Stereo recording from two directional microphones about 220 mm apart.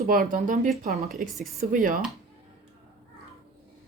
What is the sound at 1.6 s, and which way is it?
Speech, 40° right (ahead or behind).